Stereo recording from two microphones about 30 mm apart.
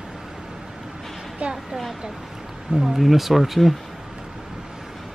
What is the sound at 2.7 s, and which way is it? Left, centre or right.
Speech, centre.